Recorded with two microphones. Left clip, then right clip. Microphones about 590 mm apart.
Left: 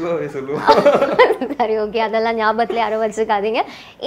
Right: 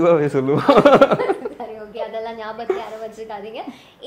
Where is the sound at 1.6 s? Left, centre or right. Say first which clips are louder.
Left 12 dB; left.